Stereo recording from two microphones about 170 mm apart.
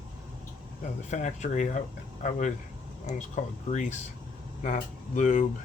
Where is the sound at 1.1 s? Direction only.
45° left (ahead or behind).